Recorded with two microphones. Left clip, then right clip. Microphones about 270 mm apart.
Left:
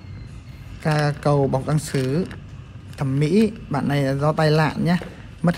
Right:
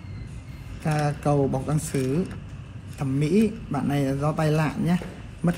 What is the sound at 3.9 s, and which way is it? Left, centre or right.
A man's voice, left.